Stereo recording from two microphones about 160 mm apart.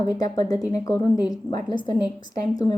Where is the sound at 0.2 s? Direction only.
25° left (ahead or behind).